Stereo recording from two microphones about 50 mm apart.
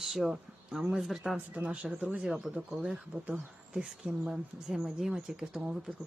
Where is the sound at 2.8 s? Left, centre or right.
Centre.